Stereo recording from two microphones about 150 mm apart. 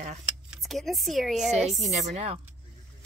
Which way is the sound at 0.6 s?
Centre (ahead or behind).